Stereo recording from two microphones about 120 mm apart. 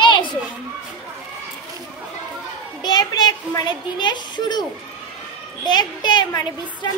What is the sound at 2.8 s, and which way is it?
A child's voice, 40° left (ahead or behind).